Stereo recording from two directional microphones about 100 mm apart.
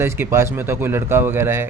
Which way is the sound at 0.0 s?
25° right (ahead or behind).